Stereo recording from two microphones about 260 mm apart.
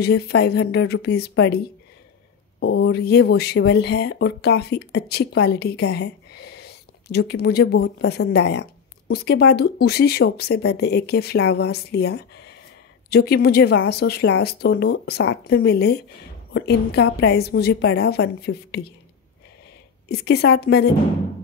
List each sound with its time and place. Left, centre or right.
0.0 s speech: left
2.6 s speech: left
20.1 s speech: left